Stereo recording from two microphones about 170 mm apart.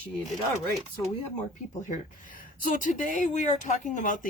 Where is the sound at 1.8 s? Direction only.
50° left (ahead or behind).